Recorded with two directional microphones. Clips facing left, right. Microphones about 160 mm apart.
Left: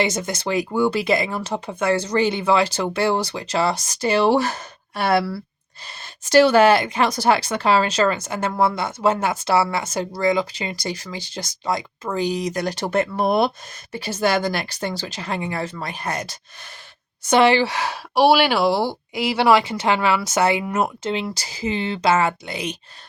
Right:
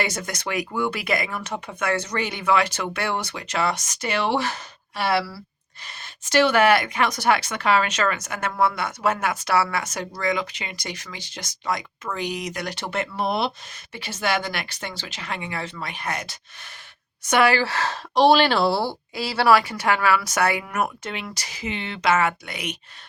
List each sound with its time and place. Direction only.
0.0 s speech: 25° left (ahead or behind); by 5.2 s 45° left (ahead or behind)
5.8 s speech: 35° left (ahead or behind)
17.2 s speech: 25° left (ahead or behind)